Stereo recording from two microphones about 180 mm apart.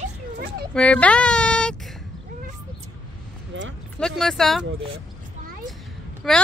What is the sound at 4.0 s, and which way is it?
Speech, 5° left (ahead or behind).